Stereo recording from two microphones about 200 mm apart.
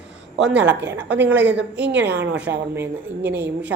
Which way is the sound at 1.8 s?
60° right (ahead or behind).